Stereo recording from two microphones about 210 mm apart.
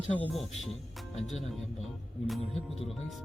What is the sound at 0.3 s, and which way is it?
Speech, centre (ahead or behind).